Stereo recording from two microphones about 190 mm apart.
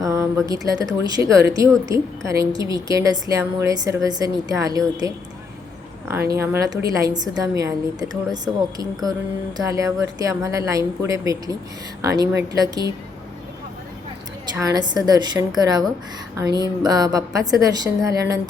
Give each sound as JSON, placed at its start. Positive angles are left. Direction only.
{"t": 0.0, "sound": "a woman's voice", "side_deg": -15}
{"t": 6.3, "sound": "a woman's voice", "side_deg": -15}
{"t": 14.4, "sound": "a woman's voice", "side_deg": -15}